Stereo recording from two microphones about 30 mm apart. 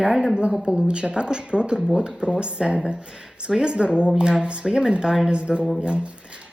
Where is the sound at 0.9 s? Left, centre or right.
Right.